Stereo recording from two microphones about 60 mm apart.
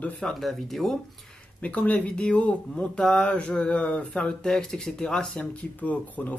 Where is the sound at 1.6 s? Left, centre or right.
Left.